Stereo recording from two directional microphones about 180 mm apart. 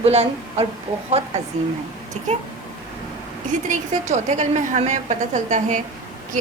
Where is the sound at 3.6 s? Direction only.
45° right (ahead or behind).